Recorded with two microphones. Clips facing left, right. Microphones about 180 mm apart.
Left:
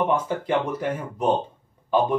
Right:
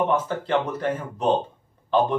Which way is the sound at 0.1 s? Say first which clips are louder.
Even; 10° left (ahead or behind).